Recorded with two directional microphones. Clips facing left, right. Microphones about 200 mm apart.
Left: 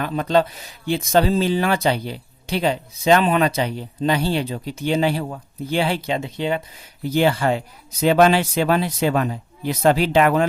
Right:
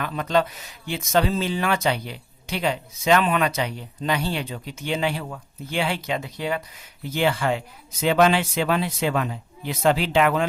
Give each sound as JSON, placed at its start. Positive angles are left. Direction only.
{"t": 0.0, "sound": "speech", "side_deg": 30}
{"t": 7.1, "sound": "speech", "side_deg": 35}